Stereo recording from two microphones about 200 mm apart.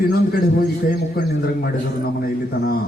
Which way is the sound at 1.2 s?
50° left (ahead or behind).